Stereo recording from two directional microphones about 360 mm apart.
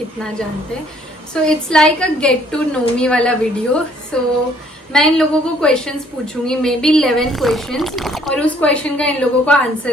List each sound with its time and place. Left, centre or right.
1.3 s a woman's voice: centre